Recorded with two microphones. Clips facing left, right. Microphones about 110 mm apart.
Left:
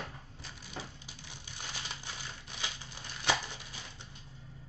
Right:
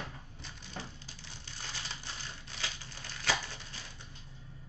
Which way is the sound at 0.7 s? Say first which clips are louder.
Even; 15° left (ahead or behind).